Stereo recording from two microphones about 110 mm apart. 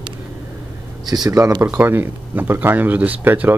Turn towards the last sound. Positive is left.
turn(degrees=-15)  # may be behind; listen again after turning